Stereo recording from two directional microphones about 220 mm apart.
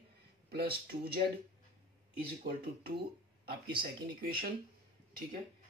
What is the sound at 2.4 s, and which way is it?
Speech, 45° right (ahead or behind).